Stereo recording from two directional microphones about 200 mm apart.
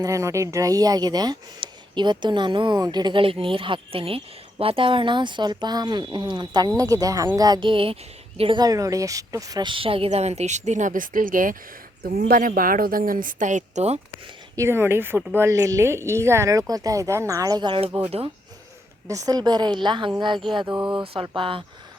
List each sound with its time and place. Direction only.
0.0 s speech: 15° right (ahead or behind); by 14.0 s 35° right (ahead or behind)
14.5 s a woman's voice: 15° right (ahead or behind)
19.0 s speech: 15° right (ahead or behind)